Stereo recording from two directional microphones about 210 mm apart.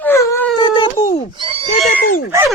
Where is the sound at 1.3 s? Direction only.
25° right (ahead or behind).